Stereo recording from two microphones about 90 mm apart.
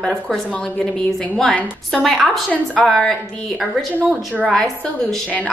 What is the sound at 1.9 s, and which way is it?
A woman's voice, 5° left (ahead or behind).